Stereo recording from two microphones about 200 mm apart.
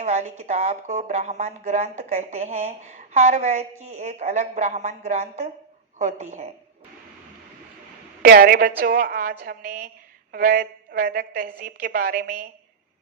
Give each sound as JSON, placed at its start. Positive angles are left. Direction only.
{"t": 0.0, "sound": "speech", "side_deg": -35}
{"t": 8.2, "sound": "a woman's voice", "side_deg": -45}